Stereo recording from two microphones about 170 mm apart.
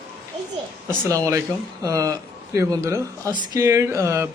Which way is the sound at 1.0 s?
20° right (ahead or behind).